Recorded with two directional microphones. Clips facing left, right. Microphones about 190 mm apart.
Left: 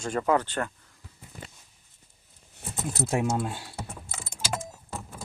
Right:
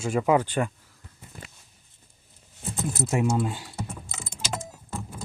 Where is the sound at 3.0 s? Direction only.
10° left (ahead or behind).